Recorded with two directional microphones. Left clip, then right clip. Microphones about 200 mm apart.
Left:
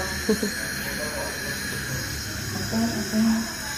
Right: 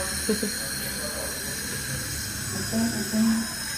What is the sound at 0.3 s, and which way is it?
Speech, 5° left (ahead or behind).